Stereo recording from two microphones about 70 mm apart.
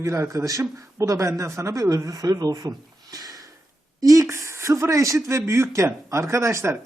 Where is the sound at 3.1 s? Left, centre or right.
Right.